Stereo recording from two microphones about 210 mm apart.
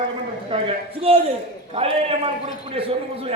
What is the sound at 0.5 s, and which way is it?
A man's voice, 25° right (ahead or behind).